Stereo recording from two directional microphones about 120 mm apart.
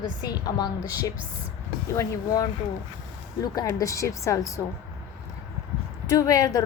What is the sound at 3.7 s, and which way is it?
Speech, 25° left (ahead or behind).